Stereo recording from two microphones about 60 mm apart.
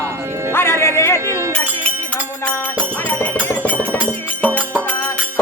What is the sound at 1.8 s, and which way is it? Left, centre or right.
Music, left.